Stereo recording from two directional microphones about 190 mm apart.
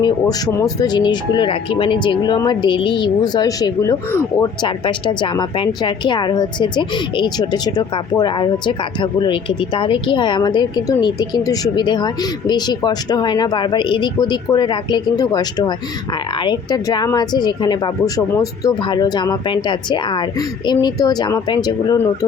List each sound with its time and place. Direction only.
0.0 s speech: 20° left (ahead or behind)